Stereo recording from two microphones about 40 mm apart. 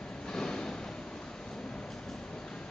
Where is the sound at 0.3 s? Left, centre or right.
Centre.